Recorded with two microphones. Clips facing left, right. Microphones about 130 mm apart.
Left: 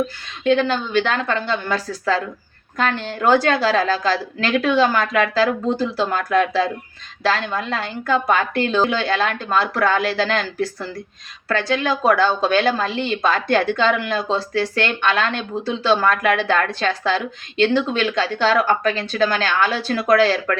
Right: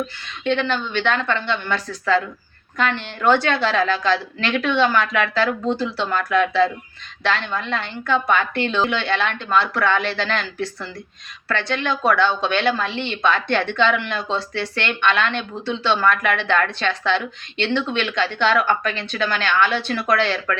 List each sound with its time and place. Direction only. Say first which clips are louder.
0.5 s speech: left 4 dB; 40° left (ahead or behind)